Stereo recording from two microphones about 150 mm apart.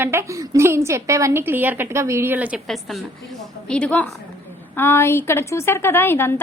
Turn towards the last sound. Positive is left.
turn(degrees=15)  # may be behind; listen again after turning